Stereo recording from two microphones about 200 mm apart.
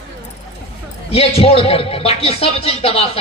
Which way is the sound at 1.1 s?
30° left (ahead or behind).